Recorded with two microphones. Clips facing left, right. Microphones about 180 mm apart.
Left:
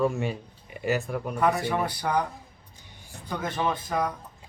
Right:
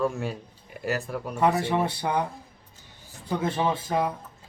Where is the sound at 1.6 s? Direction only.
25° right (ahead or behind).